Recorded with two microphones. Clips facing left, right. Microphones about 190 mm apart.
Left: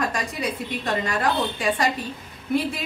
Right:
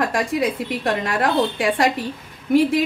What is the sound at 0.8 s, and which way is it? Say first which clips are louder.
Speech: right 3 dB; 65° right (ahead or behind).